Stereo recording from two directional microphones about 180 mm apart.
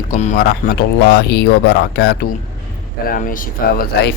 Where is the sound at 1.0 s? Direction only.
70° left (ahead or behind).